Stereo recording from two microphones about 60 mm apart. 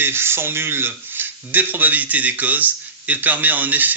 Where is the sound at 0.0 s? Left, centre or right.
Right.